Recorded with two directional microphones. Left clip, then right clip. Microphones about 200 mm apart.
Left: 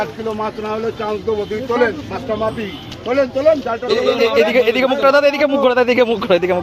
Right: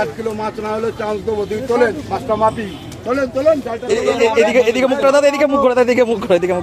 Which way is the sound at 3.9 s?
10° right (ahead or behind).